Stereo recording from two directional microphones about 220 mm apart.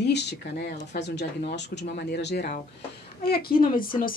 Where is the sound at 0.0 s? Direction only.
50° left (ahead or behind).